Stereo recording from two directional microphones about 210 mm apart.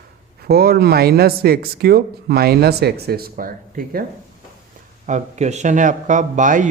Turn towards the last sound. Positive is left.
turn(degrees=-35)  # may be behind; listen again after turning